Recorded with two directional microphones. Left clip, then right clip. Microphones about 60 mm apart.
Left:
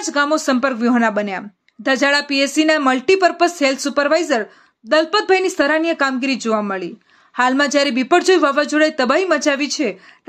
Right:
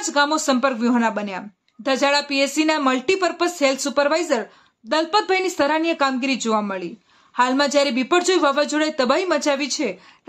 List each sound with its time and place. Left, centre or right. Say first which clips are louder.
0.0 s speech: left 2 dB; left
1.0 s speech: left 5 dB; left
7.3 s speech: left 2 dB; left